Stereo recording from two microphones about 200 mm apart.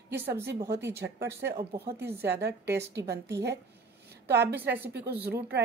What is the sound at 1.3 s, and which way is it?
Speech, 55° right (ahead or behind).